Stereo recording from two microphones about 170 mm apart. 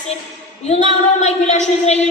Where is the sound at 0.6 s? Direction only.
40° left (ahead or behind).